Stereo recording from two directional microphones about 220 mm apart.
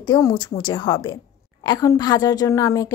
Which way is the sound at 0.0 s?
20° left (ahead or behind).